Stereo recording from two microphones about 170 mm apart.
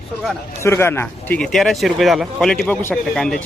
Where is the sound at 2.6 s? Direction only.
10° left (ahead or behind).